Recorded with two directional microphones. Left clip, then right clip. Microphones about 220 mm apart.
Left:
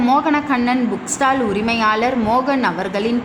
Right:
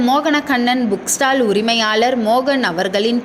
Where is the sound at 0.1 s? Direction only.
15° right (ahead or behind).